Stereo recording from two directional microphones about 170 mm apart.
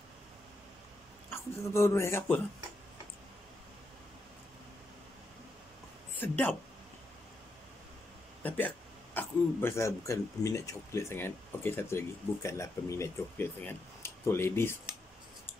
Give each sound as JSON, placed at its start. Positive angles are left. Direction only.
{"t": 1.3, "sound": "speech", "side_deg": 15}
{"t": 6.1, "sound": "speech", "side_deg": 10}
{"t": 8.4, "sound": "speech", "side_deg": 10}